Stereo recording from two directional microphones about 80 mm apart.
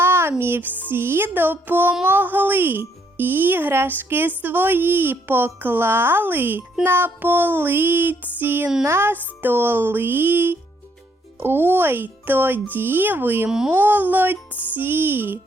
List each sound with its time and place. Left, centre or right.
0.0 s music: right
2.0 s speech: right